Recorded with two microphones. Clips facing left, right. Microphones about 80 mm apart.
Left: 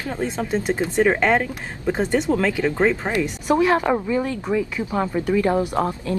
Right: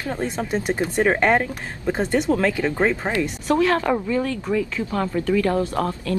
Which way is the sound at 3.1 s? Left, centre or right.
Centre.